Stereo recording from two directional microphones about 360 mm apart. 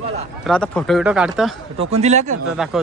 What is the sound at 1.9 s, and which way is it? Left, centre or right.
Speech, centre.